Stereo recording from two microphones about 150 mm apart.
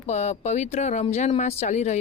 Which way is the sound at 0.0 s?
50° left (ahead or behind).